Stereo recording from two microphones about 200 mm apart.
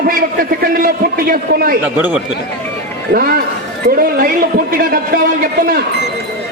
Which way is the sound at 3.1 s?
50° right (ahead or behind).